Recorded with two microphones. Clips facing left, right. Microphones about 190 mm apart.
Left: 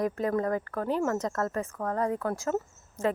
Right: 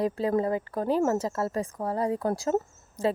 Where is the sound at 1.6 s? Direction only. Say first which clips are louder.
Right 2 dB; 15° right (ahead or behind).